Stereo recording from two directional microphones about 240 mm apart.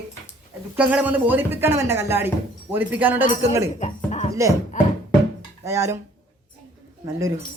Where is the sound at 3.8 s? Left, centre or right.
Left.